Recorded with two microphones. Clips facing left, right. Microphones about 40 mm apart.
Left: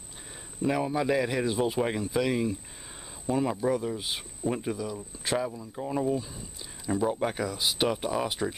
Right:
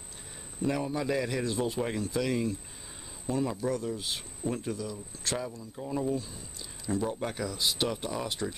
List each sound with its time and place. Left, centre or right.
0.7 s speech: centre